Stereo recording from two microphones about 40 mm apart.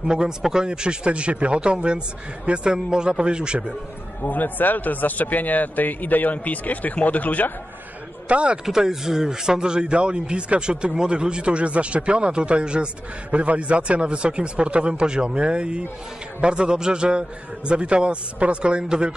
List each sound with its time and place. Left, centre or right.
0.0 s speech: centre
4.2 s speech: left
8.3 s speech: right
8.6 s speech: centre